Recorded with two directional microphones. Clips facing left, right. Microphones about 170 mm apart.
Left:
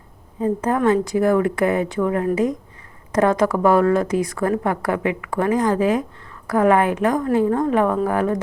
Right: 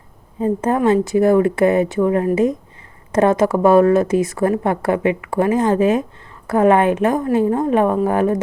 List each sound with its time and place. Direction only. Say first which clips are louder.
0.3 s a woman's voice: right 2 dB; 25° right (ahead or behind)